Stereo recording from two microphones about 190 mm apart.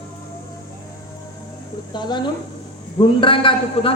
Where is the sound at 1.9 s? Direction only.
25° left (ahead or behind).